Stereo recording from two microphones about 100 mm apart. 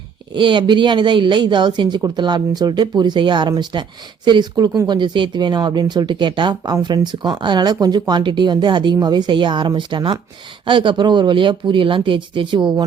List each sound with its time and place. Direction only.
0.3 s speech: 55° right (ahead or behind)